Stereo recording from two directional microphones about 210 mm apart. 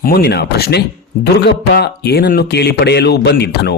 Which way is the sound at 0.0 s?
45° left (ahead or behind).